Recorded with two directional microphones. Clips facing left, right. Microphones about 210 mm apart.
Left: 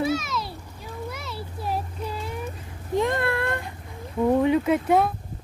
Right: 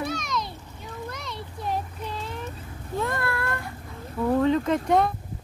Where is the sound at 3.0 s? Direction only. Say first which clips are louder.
Left 4 dB; 20° left (ahead or behind).